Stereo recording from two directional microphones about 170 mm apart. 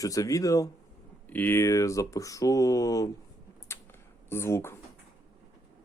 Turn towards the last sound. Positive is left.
turn(degrees=15)  # may be behind; listen again after turning